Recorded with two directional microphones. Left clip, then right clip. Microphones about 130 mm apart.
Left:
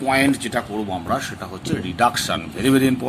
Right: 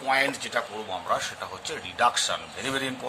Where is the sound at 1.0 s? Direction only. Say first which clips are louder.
Left 4 dB; 45° left (ahead or behind).